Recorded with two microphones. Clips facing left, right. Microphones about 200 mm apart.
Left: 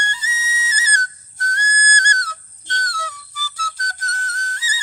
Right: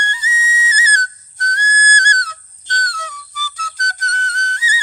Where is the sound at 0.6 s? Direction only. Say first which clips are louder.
Right 1 dB; 10° left (ahead or behind).